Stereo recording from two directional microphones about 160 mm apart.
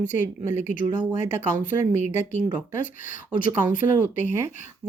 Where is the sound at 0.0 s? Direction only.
50° left (ahead or behind).